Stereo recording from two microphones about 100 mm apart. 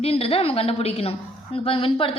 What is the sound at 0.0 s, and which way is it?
A woman's voice, 75° left (ahead or behind).